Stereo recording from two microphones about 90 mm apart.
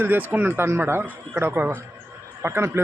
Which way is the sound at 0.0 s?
20° right (ahead or behind).